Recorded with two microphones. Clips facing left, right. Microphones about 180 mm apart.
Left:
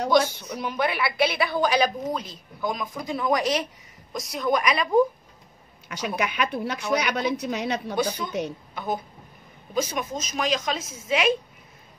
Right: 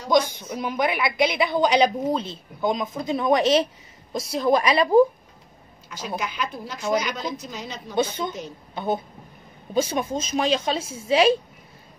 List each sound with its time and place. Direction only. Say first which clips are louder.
0.1 s speech: right 3 dB; 15° right (ahead or behind)
5.9 s a woman's voice: left 2 dB; 65° left (ahead or behind)
7.9 s a woman's voice: right 1 dB; 25° right (ahead or behind)